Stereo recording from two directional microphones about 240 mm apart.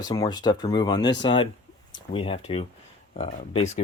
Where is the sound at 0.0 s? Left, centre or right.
Centre.